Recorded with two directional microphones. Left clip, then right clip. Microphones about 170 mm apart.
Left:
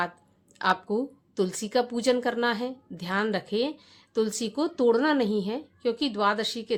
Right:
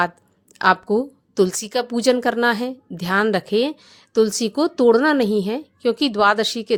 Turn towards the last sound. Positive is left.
turn(degrees=-45)  # may be behind; listen again after turning